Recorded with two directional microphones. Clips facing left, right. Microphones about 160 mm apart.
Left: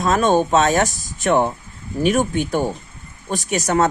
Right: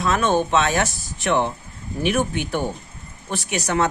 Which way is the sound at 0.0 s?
40° left (ahead or behind).